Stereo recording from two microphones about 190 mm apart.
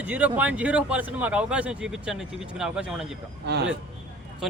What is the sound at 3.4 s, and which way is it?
Speech, 60° right (ahead or behind).